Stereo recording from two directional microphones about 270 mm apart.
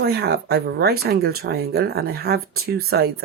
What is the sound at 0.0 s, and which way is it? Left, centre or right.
Speech, right.